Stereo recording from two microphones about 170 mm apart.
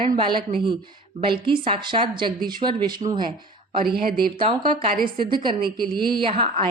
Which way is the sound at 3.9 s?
60° right (ahead or behind).